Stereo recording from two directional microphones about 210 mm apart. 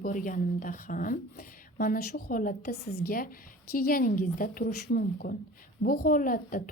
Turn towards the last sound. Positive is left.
turn(degrees=40)  # may be behind; listen again after turning